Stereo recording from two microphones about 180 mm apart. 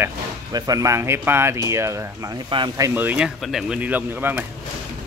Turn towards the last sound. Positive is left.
turn(degrees=-10)  # may be behind; listen again after turning